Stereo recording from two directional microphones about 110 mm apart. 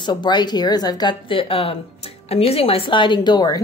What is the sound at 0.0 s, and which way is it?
A woman's voice, 40° left (ahead or behind).